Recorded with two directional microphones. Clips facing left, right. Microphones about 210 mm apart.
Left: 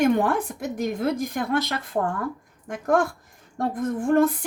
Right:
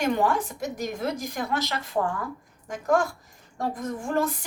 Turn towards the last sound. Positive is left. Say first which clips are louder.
# left 7 dB
turn(degrees=55)  # may be behind; listen again after turning